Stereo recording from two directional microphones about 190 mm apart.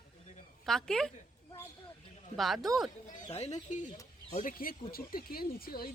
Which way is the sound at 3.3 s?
35° left (ahead or behind).